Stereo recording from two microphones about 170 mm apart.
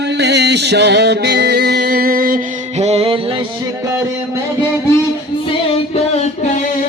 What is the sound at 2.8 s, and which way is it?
Music, 35° right (ahead or behind).